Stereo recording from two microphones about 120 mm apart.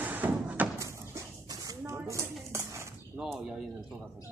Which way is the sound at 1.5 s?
25° right (ahead or behind).